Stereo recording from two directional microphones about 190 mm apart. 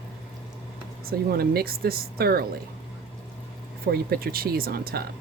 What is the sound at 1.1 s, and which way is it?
Speech, 55° right (ahead or behind).